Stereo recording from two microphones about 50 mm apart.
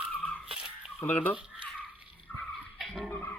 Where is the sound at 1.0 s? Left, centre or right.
Left.